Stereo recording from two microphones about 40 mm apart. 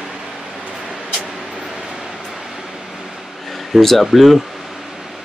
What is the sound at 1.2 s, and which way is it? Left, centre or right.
Vehicle, centre.